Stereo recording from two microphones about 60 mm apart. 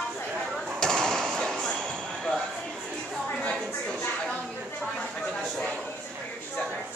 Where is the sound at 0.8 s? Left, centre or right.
Centre.